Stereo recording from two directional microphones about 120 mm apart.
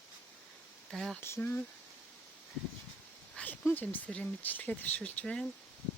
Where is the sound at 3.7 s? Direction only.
15° left (ahead or behind).